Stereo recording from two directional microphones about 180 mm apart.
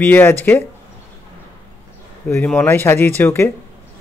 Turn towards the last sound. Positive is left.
turn(degrees=15)  # may be behind; listen again after turning